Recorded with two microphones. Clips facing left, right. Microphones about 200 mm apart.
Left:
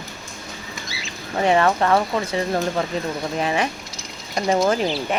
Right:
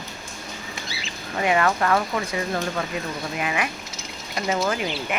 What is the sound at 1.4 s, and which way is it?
Speech, 30° left (ahead or behind).